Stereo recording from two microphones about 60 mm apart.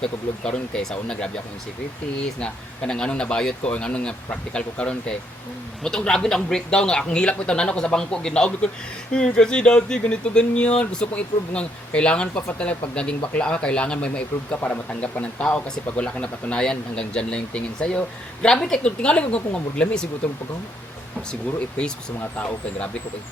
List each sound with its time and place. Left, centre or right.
0.0 s speech: centre
2.4 s speech: centre
22.4 s speech: left